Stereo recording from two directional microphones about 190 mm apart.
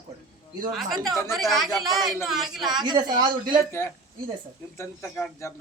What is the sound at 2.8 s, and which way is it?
Speech, 25° right (ahead or behind).